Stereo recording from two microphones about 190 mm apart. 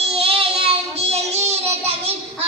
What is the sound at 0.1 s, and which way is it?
Child singing, 30° right (ahead or behind).